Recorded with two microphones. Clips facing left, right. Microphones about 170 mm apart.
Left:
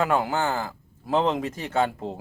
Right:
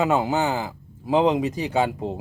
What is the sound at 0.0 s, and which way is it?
Speech, 20° right (ahead or behind).